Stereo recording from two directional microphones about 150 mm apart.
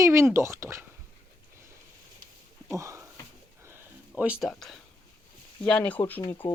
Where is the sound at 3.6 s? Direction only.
15° right (ahead or behind).